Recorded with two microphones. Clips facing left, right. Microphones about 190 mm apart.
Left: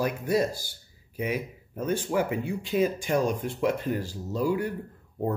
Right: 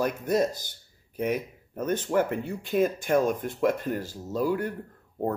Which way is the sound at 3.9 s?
15° left (ahead or behind).